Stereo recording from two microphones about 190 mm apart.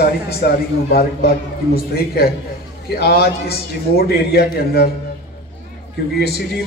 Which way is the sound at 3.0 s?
55° left (ahead or behind).